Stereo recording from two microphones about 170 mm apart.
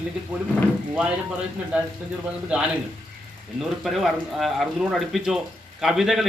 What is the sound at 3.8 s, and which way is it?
Speech, centre (ahead or behind).